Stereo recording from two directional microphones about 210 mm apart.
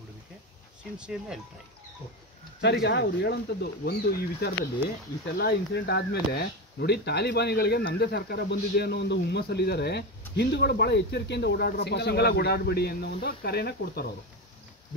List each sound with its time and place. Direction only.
0.9 s speech: 5° right (ahead or behind)
2.6 s speech: 55° left (ahead or behind)